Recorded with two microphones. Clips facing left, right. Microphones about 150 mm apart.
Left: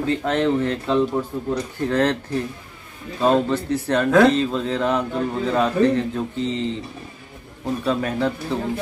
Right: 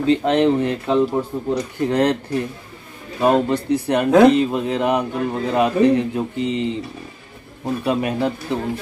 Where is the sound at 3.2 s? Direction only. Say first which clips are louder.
Right 2 dB; 15° right (ahead or behind).